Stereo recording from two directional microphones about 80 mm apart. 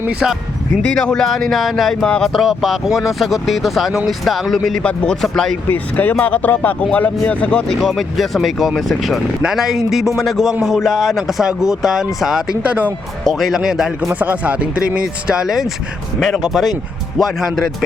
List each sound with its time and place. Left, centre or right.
0.1 s speech: centre
0.9 s speech: centre
5.6 s a man's voice: left
7.8 s speech: centre
12.6 s speech: centre
13.2 s speech: centre
14.1 s speech: centre